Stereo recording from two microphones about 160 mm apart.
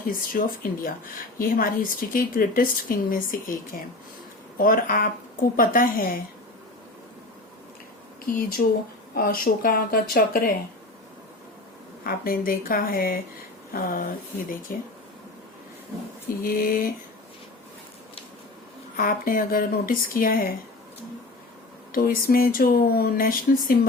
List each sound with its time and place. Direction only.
0.0 s speech: 60° left (ahead or behind)
8.3 s speech: 65° left (ahead or behind)
12.0 s speech: 65° left (ahead or behind)
16.4 s speech: 60° left (ahead or behind)
18.9 s speech: 65° left (ahead or behind)
21.9 s speech: 65° left (ahead or behind)